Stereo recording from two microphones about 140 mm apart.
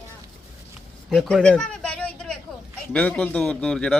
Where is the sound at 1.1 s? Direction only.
5° left (ahead or behind).